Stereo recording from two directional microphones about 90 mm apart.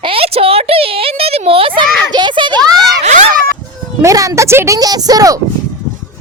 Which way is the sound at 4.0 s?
35° right (ahead or behind).